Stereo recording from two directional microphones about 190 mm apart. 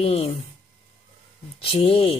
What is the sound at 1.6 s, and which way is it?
Speech, 30° left (ahead or behind).